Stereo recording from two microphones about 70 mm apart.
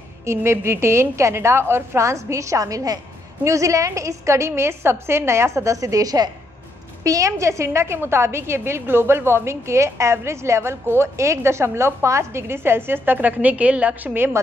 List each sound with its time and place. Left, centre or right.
0.3 s a woman's voice: right
3.4 s a woman's voice: right
7.0 s a woman's voice: right